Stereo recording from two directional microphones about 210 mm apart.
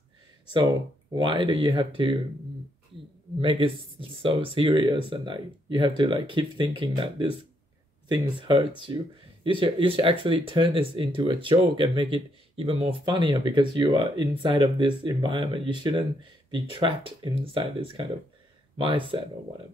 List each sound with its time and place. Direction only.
1.1 s speech: 25° right (ahead or behind)
3.3 s speech: 25° right (ahead or behind)